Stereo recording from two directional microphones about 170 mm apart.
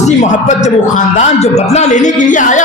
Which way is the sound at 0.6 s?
40° left (ahead or behind).